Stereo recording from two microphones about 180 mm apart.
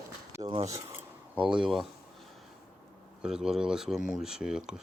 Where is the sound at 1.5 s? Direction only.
Centre (ahead or behind).